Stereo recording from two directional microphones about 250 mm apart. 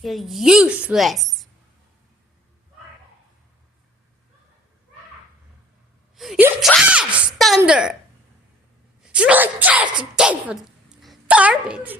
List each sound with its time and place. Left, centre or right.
0.0 s a woman's voice: centre
6.1 s a woman's voice: centre
9.0 s a woman's voice: centre